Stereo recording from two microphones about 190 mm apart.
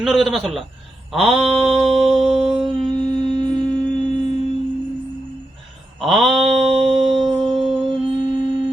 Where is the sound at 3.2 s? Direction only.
25° right (ahead or behind).